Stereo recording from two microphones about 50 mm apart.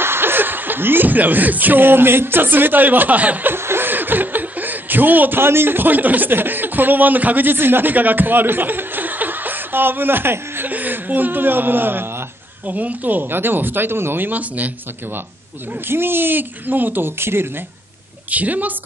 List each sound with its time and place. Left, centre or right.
0.0 s speech: right
3.5 s speech: right
10.7 s speech: right
12.6 s speech: right
15.9 s speech: right
18.3 s speech: right